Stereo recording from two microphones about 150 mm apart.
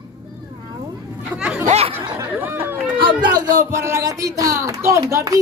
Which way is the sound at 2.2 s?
15° right (ahead or behind).